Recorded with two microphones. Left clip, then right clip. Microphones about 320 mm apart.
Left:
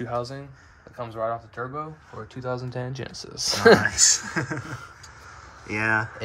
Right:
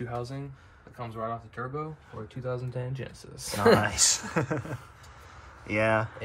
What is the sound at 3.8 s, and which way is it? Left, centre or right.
Speech, centre.